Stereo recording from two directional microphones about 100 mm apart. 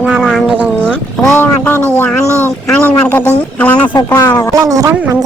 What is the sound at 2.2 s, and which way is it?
Speech, 30° right (ahead or behind).